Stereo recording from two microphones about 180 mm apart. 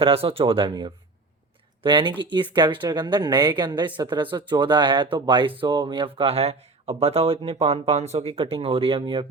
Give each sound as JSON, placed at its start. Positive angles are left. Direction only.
{"t": 0.0, "sound": "a woman's voice", "side_deg": -30}